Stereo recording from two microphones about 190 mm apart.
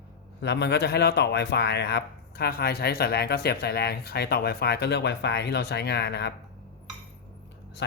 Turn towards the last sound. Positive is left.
turn(degrees=60)  # may be behind; listen again after turning